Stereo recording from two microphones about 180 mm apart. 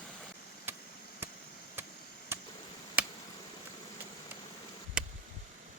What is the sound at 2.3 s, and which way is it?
Chop, 15° right (ahead or behind).